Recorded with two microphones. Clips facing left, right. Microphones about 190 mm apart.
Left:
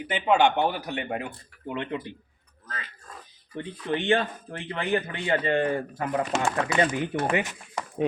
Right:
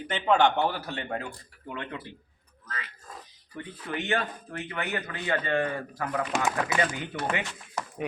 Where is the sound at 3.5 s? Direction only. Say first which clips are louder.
Left 5 dB; 30° left (ahead or behind).